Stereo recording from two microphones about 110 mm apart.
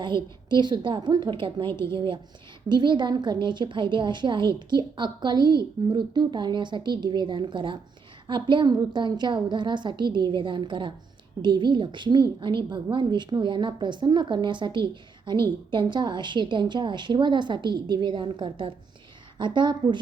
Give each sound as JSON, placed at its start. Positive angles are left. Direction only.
{"t": 0.0, "sound": "a woman's voice", "side_deg": -45}